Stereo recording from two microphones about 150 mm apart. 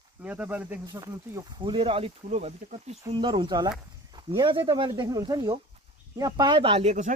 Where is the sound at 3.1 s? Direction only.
35° right (ahead or behind); by 7.1 s 50° right (ahead or behind).